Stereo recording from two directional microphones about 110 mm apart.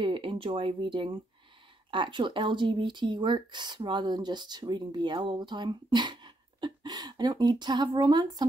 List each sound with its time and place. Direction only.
0.0 s speech: 50° right (ahead or behind)